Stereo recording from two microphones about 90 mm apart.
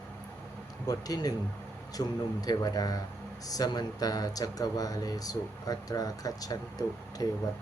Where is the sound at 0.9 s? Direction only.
45° left (ahead or behind).